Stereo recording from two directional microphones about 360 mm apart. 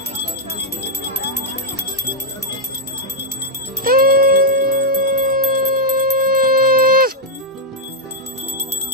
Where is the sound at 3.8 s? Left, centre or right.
Right.